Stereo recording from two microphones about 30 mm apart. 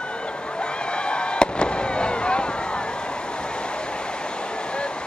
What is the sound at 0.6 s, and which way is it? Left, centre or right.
Fireworks, left.